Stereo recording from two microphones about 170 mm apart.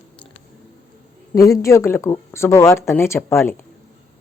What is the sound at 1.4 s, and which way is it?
Speech, 20° left (ahead or behind).